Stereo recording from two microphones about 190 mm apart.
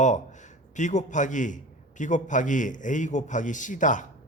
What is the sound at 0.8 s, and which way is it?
A man's voice, 40° left (ahead or behind).